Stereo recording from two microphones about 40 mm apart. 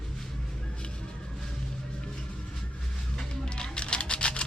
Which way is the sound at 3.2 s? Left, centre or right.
Left.